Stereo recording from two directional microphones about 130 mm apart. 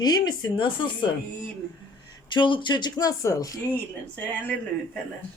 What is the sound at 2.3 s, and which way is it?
Speech, 40° left (ahead or behind).